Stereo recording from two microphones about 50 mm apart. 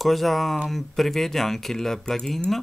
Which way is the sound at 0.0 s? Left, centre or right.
Centre.